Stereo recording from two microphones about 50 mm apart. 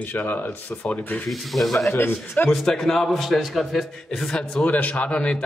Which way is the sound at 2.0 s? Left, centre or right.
Left.